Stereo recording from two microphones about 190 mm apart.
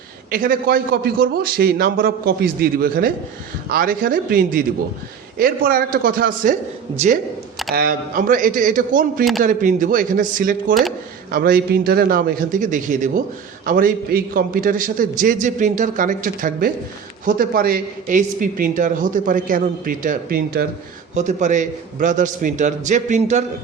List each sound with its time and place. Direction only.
0.3 s a man's voice: 50° right (ahead or behind)
7.7 s a man's voice: 50° right (ahead or behind)
21.2 s a man's voice: 40° right (ahead or behind)